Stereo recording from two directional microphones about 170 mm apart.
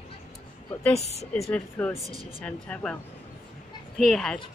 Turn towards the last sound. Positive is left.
turn(degrees=0)  # may be behind; listen again after turning